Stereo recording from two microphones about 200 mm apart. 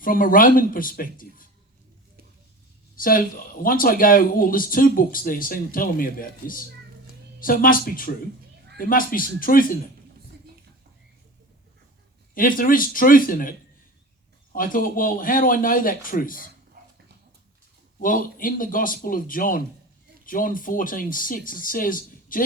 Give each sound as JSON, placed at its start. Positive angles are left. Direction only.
{"t": 0.0, "sound": "speech", "side_deg": 45}
{"t": 2.9, "sound": "speech", "side_deg": 45}
{"t": 12.3, "sound": "speech", "side_deg": 45}
{"t": 14.5, "sound": "speech", "side_deg": 45}
{"t": 18.0, "sound": "speech", "side_deg": 45}